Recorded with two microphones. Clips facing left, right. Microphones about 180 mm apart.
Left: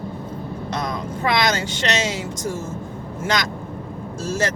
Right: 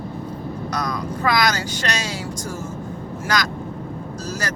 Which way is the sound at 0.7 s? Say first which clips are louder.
Even; 25° left (ahead or behind).